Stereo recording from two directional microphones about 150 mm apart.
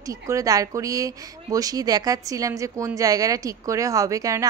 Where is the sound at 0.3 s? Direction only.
20° right (ahead or behind).